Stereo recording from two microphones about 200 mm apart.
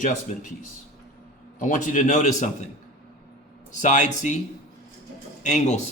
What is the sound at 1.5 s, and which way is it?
A man's voice, 40° left (ahead or behind).